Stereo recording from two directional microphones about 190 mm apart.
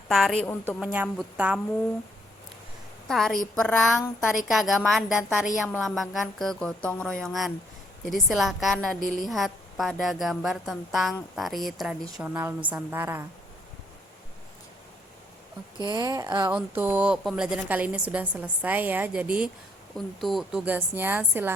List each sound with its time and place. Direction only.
0.1 s speech: centre (ahead or behind)
0.4 s a woman's voice: 10° left (ahead or behind)
0.8 s speech: 5° right (ahead or behind)
3.1 s a woman's voice: centre (ahead or behind)
15.8 s a woman's voice: 20° right (ahead or behind)
16.5 s a woman's voice: 10° right (ahead or behind)